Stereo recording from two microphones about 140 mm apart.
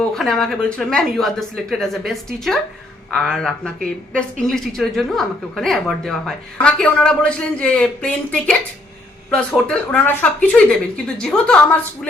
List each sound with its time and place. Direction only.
0.1 s a woman's voice: 5° left (ahead or behind)